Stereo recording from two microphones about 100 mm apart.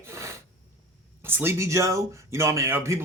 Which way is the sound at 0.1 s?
30° right (ahead or behind).